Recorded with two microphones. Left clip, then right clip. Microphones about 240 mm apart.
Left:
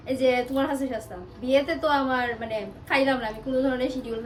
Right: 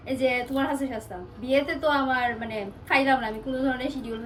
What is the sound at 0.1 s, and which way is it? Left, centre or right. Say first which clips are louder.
Speech: left 2 dB; centre.